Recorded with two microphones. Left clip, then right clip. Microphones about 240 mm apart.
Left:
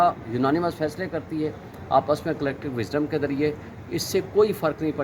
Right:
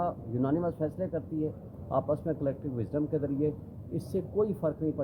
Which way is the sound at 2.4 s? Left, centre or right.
Centre.